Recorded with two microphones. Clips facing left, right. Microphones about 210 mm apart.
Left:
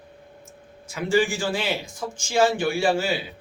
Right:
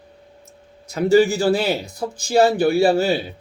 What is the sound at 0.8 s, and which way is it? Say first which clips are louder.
Speech: right 7 dB; 40° right (ahead or behind).